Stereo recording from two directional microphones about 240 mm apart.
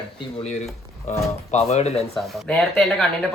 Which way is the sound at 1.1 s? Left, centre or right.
Left.